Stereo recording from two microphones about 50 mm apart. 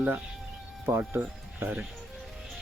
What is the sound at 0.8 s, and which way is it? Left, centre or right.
Speech, right.